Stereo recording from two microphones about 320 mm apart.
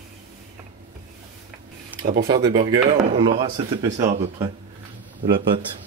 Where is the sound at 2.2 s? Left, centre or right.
Centre.